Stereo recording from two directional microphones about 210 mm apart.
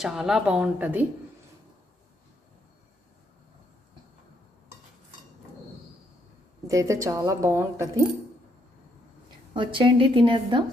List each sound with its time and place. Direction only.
0.0 s a woman's voice: centre (ahead or behind)
6.7 s a woman's voice: 15° right (ahead or behind)
9.6 s a woman's voice: 25° right (ahead or behind)